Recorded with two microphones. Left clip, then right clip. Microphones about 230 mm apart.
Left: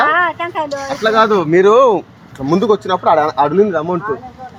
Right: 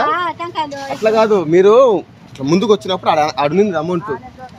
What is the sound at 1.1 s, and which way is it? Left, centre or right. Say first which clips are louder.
Speech: left 1 dB; left.